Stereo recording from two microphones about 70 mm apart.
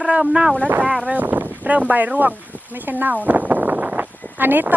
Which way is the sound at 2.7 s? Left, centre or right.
Right.